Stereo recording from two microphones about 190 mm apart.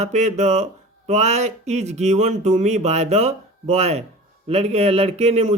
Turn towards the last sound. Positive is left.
turn(degrees=-35)  # may be behind; listen again after turning